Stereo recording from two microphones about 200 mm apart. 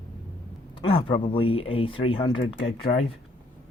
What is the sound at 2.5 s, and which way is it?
Speech, 60° left (ahead or behind).